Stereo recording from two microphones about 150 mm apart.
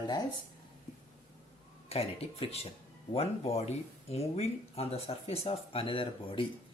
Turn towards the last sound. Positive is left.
turn(degrees=35)  # may be behind; listen again after turning